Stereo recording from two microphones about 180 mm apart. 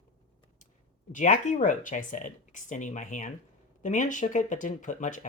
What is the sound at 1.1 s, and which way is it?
Speech, 45° left (ahead or behind).